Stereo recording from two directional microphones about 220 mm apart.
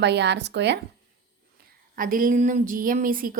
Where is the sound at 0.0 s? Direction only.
50° right (ahead or behind).